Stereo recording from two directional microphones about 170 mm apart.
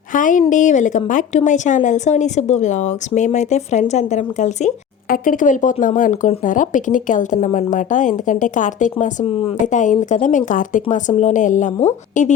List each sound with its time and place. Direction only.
0.1 s speech: 50° left (ahead or behind)